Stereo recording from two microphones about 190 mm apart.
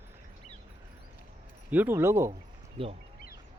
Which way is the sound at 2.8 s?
30° right (ahead or behind).